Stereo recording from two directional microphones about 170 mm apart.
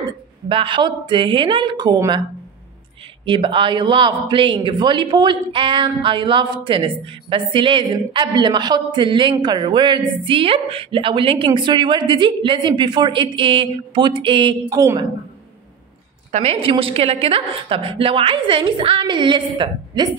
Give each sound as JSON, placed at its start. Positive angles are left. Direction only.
{"t": 0.0, "sound": "speech", "side_deg": -30}
{"t": 3.3, "sound": "a man's voice", "side_deg": -30}
{"t": 16.3, "sound": "a woman's voice", "side_deg": -40}